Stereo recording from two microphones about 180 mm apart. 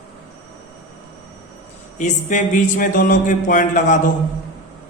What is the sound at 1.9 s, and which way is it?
Speech, 45° left (ahead or behind).